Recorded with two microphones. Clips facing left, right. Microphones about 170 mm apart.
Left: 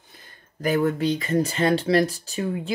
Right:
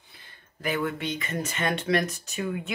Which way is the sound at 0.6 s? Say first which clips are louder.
Left 7 dB; 40° left (ahead or behind).